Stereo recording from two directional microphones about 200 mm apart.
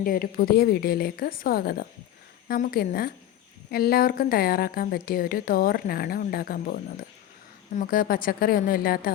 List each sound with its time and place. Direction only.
0.0 s a woman's voice: 45° left (ahead or behind)
7.8 s a woman's voice: 45° left (ahead or behind)